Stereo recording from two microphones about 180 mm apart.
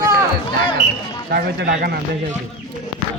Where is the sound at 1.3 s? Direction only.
60° right (ahead or behind).